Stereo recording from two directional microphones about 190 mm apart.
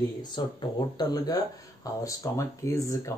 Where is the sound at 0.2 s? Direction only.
25° left (ahead or behind).